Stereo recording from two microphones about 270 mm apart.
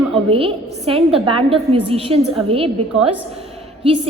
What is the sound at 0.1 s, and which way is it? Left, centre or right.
A woman's voice, centre.